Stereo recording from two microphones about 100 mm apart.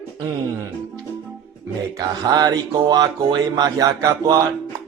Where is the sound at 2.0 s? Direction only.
40° right (ahead or behind).